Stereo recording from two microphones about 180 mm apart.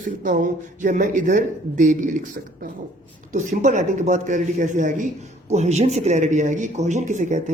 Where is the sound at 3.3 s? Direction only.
45° right (ahead or behind).